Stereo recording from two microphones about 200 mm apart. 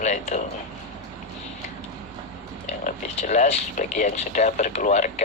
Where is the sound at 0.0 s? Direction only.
35° left (ahead or behind).